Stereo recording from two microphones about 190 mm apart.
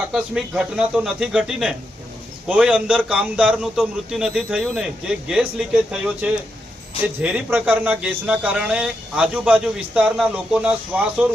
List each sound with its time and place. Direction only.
0.1 s a man's voice: 5° right (ahead or behind)